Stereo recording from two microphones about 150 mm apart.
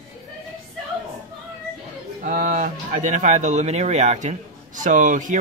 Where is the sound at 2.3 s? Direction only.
60° right (ahead or behind).